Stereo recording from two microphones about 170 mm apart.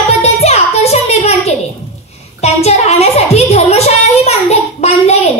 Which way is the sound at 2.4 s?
40° left (ahead or behind).